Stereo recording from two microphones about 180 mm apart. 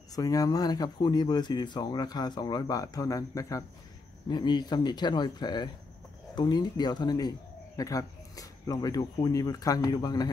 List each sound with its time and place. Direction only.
0.1 s a man's voice: 20° left (ahead or behind)